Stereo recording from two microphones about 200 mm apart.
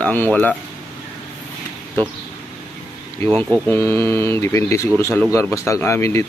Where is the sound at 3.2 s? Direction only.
15° left (ahead or behind).